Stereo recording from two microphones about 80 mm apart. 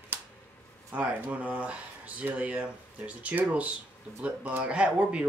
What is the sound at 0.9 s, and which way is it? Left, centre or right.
Speech, right.